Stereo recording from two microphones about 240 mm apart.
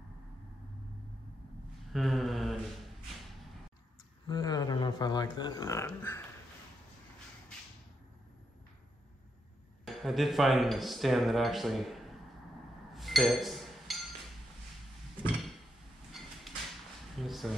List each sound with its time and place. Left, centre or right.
1.9 s mantra: centre
4.3 s speech: centre
9.8 s speech: centre
12.9 s chink: centre
16.1 s train: centre
17.2 s speech: centre